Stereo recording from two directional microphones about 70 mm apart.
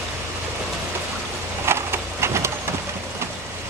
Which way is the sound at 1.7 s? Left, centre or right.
Right.